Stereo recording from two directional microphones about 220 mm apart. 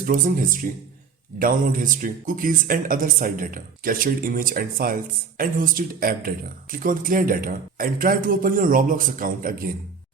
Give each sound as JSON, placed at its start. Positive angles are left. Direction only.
{"t": 0.0, "sound": "a man's voice", "side_deg": -40}